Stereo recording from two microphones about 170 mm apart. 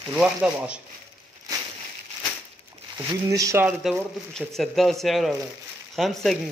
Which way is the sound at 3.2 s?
20° right (ahead or behind).